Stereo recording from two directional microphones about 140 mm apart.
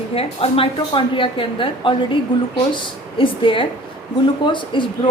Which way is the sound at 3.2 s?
40° left (ahead or behind).